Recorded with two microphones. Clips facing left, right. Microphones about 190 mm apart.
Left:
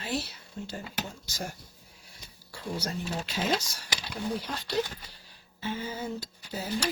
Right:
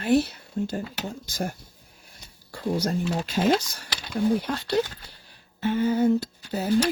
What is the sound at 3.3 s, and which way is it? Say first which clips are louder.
Speech: right 8 dB; 55° right (ahead or behind).